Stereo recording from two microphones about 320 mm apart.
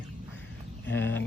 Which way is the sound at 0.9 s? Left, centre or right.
Left.